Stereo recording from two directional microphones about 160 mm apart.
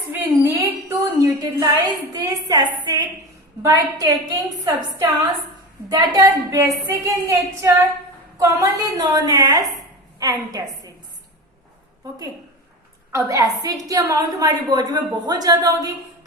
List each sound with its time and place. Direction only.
0.1 s a sound: 20° right (ahead or behind)
2.1 s a woman's voice: 25° right (ahead or behind)
13.1 s a woman's voice: 20° right (ahead or behind)